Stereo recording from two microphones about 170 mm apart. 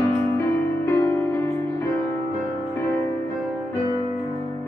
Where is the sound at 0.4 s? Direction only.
20° left (ahead or behind).